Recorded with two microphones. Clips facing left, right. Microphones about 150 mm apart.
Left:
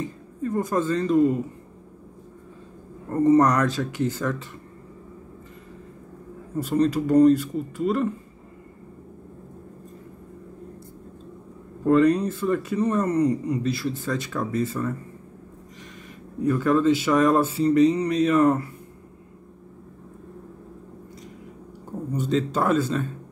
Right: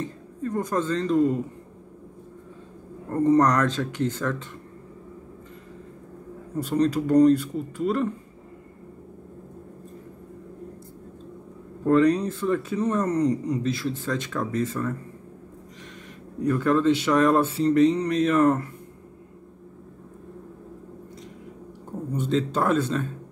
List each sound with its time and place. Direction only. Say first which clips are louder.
0.0 s speech: left 1 dB; 5° left (ahead or behind)
3.1 s speech: left 2 dB; 5° left (ahead or behind)
6.5 s speech: left 1 dB; 5° left (ahead or behind)
11.8 s speech: left 1 dB; 5° left (ahead or behind)
16.3 s speech: left 1 dB; 5° left (ahead or behind)
22.1 s speech: left 1 dB; centre (ahead or behind)